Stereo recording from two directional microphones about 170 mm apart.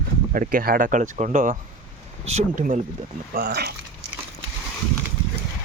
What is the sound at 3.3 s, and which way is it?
Speech, 60° right (ahead or behind).